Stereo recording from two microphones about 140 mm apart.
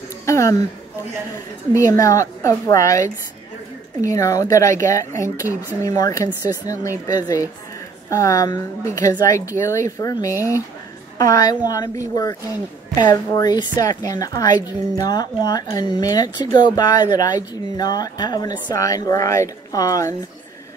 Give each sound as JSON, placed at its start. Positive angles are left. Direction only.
{"t": 0.2, "sound": "speech", "side_deg": 20}
{"t": 1.8, "sound": "a woman's voice", "side_deg": 25}
{"t": 5.5, "sound": "speech", "side_deg": -15}
{"t": 5.8, "sound": "a woman's voice", "side_deg": 25}